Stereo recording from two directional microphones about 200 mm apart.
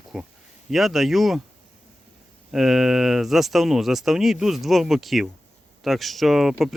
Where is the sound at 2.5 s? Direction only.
Centre (ahead or behind).